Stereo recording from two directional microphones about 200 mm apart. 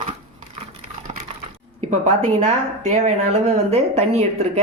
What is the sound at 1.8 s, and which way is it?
Speech, 30° right (ahead or behind).